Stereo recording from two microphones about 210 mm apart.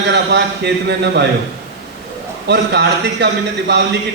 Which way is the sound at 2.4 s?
55° right (ahead or behind).